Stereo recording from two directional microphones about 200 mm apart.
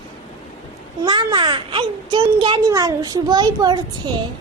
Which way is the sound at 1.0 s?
20° right (ahead or behind).